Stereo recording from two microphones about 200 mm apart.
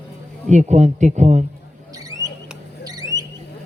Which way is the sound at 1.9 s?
15° right (ahead or behind).